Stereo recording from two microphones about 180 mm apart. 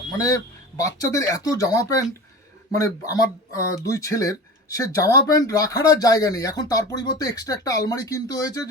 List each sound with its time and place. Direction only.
0.8 s speech: 20° left (ahead or behind)